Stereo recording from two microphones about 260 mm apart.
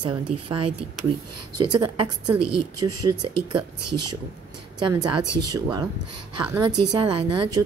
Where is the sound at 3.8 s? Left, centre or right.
Right.